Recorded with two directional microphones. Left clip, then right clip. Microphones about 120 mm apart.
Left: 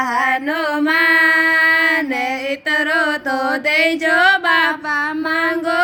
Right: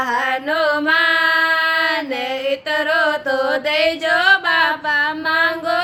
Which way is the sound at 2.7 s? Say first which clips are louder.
Left 1 dB; 40° left (ahead or behind).